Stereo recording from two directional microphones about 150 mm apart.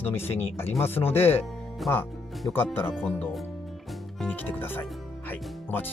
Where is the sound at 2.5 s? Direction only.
15° left (ahead or behind).